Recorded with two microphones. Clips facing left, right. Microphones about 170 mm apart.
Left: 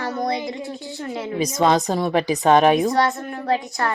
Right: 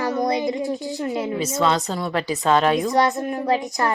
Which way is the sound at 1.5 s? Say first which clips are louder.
Left 4 dB; 15° left (ahead or behind).